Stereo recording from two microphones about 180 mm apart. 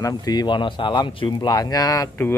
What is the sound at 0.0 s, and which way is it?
Speech, 20° left (ahead or behind).